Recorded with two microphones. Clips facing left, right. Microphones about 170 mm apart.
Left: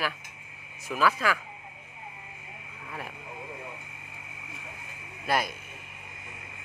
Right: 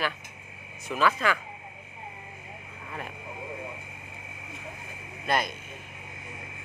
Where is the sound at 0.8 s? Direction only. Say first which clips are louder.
Right 1 dB; 5° left (ahead or behind).